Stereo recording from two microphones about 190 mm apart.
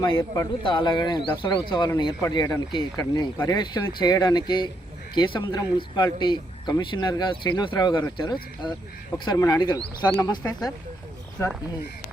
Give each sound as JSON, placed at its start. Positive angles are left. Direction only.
{"t": 0.0, "sound": "speech", "side_deg": 20}